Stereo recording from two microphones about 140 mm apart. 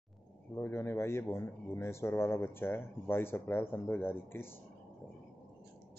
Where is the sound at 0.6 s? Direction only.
15° left (ahead or behind).